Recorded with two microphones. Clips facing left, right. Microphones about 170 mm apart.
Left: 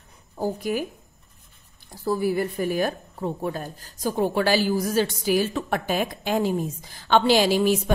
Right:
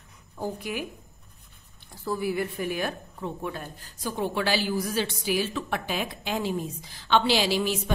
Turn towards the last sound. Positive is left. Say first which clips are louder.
# left 6 dB
turn(degrees=45)  # may be behind; listen again after turning